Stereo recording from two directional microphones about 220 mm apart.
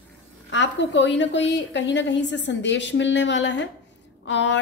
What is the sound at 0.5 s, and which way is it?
A woman's voice, 55° left (ahead or behind).